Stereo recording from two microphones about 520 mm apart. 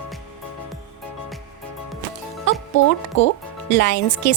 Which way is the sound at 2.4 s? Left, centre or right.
Left.